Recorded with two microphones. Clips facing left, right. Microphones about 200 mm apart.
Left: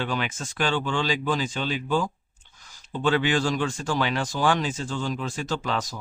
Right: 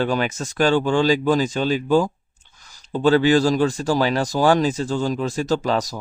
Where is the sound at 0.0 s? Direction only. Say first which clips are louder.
Right 7 dB; 40° right (ahead or behind).